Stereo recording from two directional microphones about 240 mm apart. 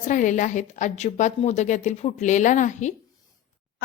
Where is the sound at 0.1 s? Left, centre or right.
Left.